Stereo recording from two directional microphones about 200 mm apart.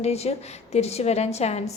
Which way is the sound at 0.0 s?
30° left (ahead or behind).